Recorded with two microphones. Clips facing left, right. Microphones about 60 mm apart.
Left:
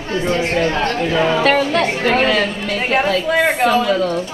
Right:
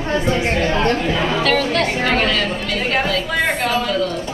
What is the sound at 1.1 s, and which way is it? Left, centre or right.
Speech, centre.